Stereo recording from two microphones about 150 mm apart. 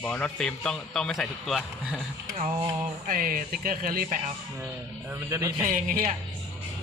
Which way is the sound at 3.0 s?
70° right (ahead or behind).